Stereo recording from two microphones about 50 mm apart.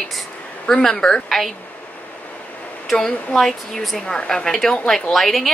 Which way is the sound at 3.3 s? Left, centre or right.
Centre.